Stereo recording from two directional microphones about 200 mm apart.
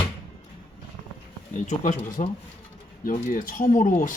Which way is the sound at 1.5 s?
40° left (ahead or behind).